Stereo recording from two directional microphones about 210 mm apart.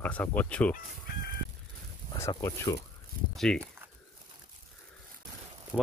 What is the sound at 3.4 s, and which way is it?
Speech, 5° left (ahead or behind).